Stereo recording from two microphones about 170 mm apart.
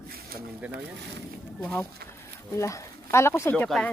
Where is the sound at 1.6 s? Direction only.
10° left (ahead or behind).